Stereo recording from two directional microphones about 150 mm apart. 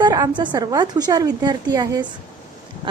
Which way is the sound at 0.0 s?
30° right (ahead or behind).